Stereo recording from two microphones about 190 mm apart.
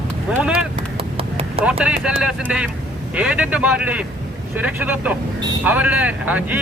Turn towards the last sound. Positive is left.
turn(degrees=-10)  # may be behind; listen again after turning